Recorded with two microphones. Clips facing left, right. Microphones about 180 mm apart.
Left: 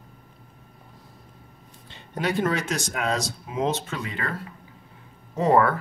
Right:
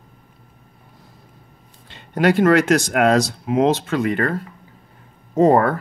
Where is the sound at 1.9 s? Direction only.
70° right (ahead or behind).